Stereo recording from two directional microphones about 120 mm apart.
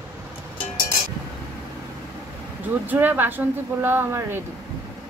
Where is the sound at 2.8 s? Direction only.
15° right (ahead or behind).